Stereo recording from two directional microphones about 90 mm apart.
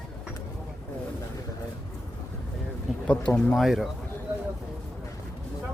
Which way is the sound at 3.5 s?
Centre (ahead or behind).